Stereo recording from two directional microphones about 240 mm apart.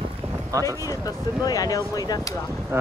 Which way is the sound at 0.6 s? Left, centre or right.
Centre.